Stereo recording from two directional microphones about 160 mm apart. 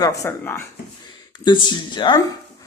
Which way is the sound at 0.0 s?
20° left (ahead or behind).